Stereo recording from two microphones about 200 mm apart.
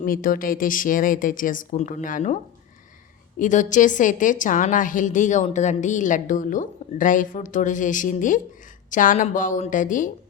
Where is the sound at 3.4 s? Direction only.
40° left (ahead or behind).